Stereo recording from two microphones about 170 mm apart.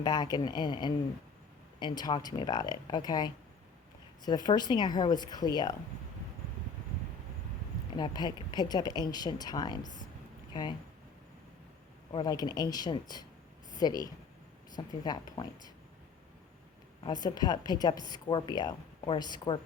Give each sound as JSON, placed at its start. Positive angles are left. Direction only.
{"t": 0.0, "sound": "a woman's voice", "side_deg": 25}
{"t": 7.9, "sound": "a woman's voice", "side_deg": 25}
{"t": 12.1, "sound": "a woman's voice", "side_deg": 25}
{"t": 17.0, "sound": "a woman's voice", "side_deg": 25}